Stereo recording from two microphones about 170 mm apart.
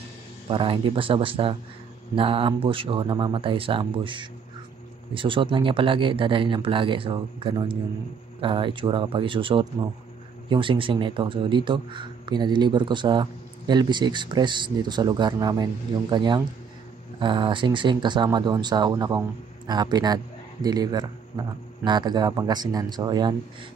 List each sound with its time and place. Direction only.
0.5 s a man's voice: 30° right (ahead or behind)